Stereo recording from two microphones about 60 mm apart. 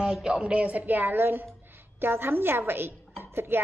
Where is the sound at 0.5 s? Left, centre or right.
Right.